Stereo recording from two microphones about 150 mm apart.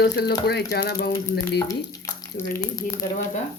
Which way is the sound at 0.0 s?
90° left.